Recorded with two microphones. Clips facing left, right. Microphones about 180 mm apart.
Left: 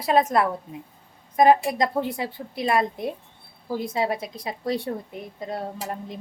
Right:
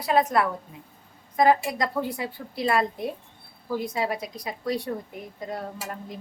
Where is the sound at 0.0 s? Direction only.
25° left (ahead or behind).